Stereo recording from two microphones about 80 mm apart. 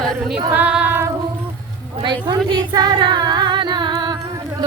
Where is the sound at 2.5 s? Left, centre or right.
Right.